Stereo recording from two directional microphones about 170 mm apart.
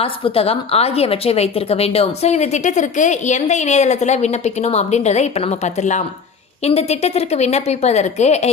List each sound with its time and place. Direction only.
0.0 s a woman's voice: 35° left (ahead or behind)